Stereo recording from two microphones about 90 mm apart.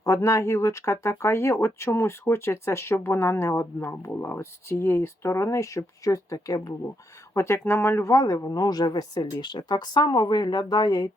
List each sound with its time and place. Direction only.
0.0 s speech: 35° left (ahead or behind)
7.3 s speech: 30° left (ahead or behind)
8.1 s speech: 40° left (ahead or behind)